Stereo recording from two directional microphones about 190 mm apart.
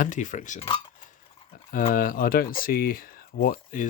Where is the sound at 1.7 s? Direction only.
45° left (ahead or behind).